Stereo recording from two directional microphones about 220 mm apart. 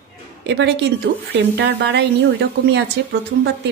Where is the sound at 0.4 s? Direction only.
50° right (ahead or behind).